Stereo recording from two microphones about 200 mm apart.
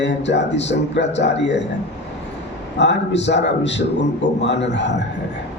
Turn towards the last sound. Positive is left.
turn(degrees=60)  # may be behind; listen again after turning